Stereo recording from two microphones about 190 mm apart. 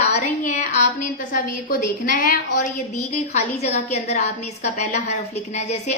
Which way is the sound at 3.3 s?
35° left (ahead or behind).